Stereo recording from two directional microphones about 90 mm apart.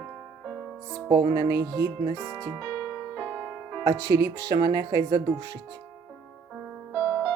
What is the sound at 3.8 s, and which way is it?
Speech, 40° right (ahead or behind).